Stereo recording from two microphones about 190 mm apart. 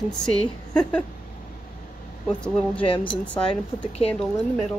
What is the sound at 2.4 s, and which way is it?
Speech, 5° left (ahead or behind).